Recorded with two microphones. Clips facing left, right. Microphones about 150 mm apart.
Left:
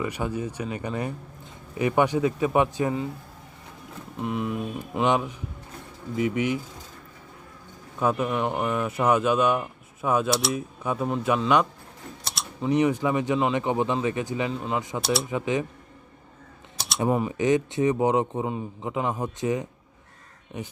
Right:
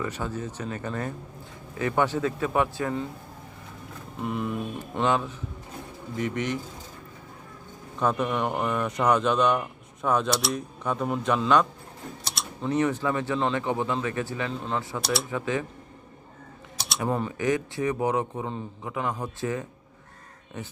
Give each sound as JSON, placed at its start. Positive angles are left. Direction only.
{"t": 0.0, "sound": "a man's voice", "side_deg": 15}
{"t": 4.2, "sound": "speech", "side_deg": 0}
{"t": 5.0, "sound": "a man's voice", "side_deg": 15}
{"t": 7.9, "sound": "a man's voice", "side_deg": 5}
{"t": 12.2, "sound": "typing", "side_deg": 0}
{"t": 12.7, "sound": "a man's voice", "side_deg": 15}
{"t": 15.0, "sound": "speech", "side_deg": 0}
{"t": 15.3, "sound": "a man's voice", "side_deg": 20}
{"t": 16.7, "sound": "a sound", "side_deg": 0}
{"t": 17.1, "sound": "a man's voice", "side_deg": 10}